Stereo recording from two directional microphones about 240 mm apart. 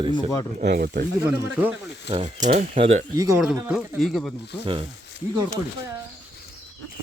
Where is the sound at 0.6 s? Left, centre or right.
Right.